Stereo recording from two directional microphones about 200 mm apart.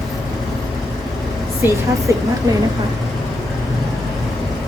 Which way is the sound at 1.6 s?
10° right (ahead or behind).